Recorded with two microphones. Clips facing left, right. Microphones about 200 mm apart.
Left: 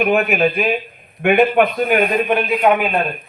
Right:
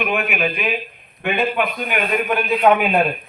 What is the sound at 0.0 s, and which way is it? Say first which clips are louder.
Speech: left 6 dB; 40° left (ahead or behind).